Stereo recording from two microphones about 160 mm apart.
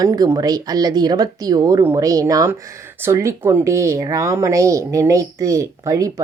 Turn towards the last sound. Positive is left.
turn(degrees=-20)  # may be behind; listen again after turning